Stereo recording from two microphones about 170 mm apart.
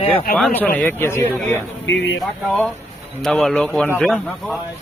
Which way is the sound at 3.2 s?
Centre (ahead or behind).